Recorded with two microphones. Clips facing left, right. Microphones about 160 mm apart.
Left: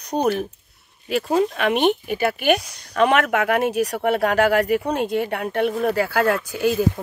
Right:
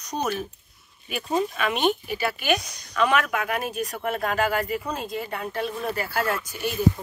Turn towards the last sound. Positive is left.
turn(degrees=90)